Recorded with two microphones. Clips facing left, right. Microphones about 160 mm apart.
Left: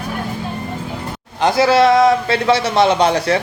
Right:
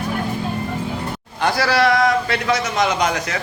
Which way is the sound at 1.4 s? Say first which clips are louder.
Left 5 dB; 20° left (ahead or behind).